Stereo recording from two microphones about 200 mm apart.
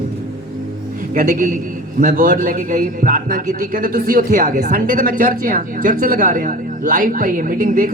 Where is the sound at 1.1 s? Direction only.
45° right (ahead or behind).